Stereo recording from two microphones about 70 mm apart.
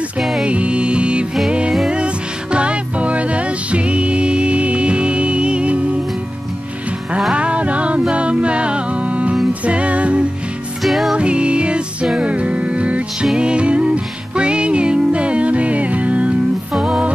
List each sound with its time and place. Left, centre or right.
0.2 s music: centre
0.5 s music: centre
7.3 s music: centre
10.8 s music: centre
11.1 s music: centre